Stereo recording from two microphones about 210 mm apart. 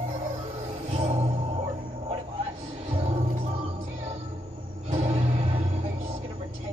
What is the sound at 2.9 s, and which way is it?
Music, 30° right (ahead or behind).